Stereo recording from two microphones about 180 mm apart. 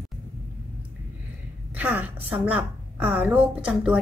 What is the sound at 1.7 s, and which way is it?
A woman's voice, 10° right (ahead or behind).